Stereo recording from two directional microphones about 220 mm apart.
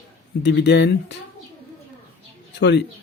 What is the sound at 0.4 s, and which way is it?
Speech, 50° left (ahead or behind).